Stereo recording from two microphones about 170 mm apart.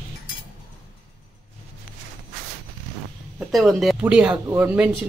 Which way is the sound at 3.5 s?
Centre (ahead or behind).